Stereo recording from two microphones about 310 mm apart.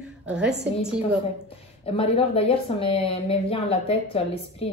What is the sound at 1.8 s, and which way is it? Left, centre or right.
A woman's voice, centre.